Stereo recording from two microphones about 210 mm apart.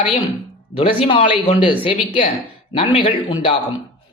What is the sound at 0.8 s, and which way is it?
A man's voice, 25° left (ahead or behind).